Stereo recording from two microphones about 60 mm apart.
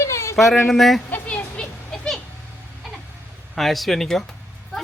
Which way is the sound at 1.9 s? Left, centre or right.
Centre.